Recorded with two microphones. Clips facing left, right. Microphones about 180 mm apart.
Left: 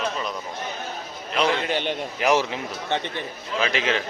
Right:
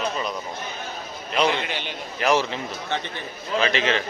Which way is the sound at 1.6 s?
45° left (ahead or behind).